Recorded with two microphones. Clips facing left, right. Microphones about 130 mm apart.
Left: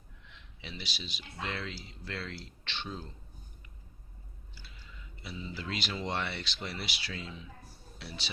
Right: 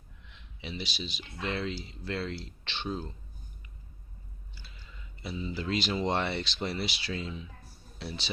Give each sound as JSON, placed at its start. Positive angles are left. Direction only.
{"t": 0.6, "sound": "speech", "side_deg": -20}
{"t": 5.5, "sound": "speech", "side_deg": -30}